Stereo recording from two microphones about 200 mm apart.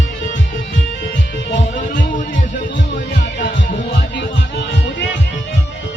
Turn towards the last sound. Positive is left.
turn(degrees=60)  # may be behind; listen again after turning